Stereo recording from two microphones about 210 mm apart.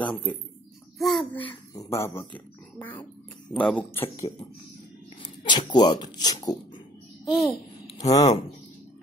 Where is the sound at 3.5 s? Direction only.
5° left (ahead or behind).